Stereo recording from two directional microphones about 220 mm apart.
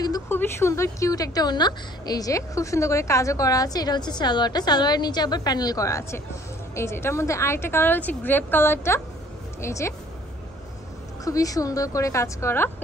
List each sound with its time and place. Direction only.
0.0 s a woman's voice: 15° left (ahead or behind)
11.2 s a woman's voice: 15° left (ahead or behind)